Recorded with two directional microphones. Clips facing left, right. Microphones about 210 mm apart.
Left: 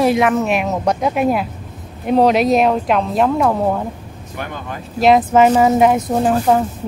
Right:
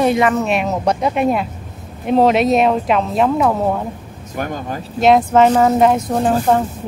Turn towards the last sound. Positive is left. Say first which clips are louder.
# even
turn(degrees=0)  # may be behind; listen again after turning